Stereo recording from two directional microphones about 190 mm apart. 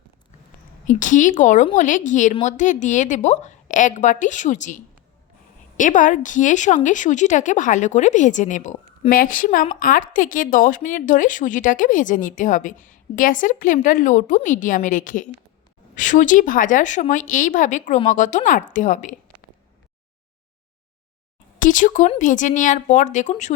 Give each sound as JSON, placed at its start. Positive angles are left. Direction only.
{"t": 0.9, "sound": "speech", "side_deg": 40}
{"t": 21.6, "sound": "speech", "side_deg": 45}